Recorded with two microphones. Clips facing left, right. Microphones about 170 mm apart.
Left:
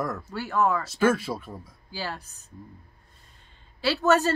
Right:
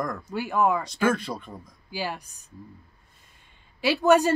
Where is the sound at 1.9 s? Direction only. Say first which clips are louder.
Right 3 dB; 15° right (ahead or behind).